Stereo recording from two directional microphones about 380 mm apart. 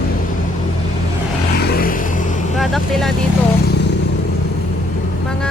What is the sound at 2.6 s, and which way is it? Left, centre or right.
Speech, centre.